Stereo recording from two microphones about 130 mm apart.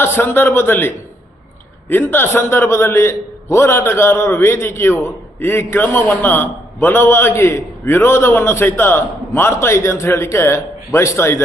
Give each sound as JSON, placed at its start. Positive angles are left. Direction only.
{"t": 0.0, "sound": "a man's voice", "side_deg": 20}